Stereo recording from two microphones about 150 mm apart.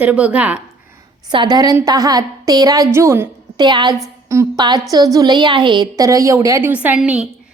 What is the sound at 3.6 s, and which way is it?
A woman's voice, 30° right (ahead or behind).